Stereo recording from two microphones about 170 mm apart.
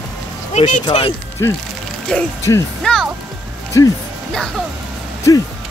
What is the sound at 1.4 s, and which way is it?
Speech, 20° left (ahead or behind).